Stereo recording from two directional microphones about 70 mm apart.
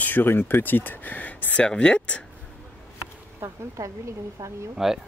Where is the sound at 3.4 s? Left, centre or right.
Right.